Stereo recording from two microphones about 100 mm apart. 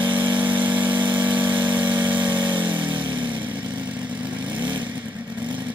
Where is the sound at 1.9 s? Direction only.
20° right (ahead or behind).